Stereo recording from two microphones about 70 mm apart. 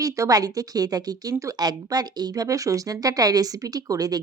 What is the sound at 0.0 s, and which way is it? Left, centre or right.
Speech, right.